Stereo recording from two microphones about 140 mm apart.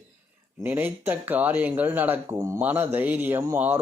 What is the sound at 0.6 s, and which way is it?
Speech, 15° right (ahead or behind).